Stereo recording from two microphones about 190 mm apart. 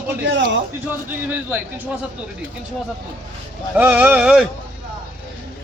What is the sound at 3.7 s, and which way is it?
Speech, 10° right (ahead or behind).